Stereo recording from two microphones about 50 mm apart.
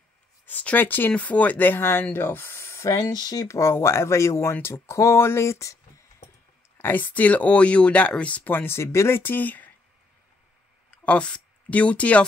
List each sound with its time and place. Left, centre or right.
0.5 s speech: left
1.1 s speech: left
3.4 s speech: left
3.7 s speech: left
4.9 s a sound: left
5.2 s a sound: left
6.8 s speech: left
8.5 s speech: left
8.7 s speech: left
9.2 s speech: left
10.9 s speech: left